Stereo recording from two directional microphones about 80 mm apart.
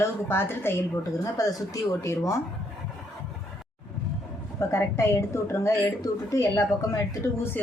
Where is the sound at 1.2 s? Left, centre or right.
Left.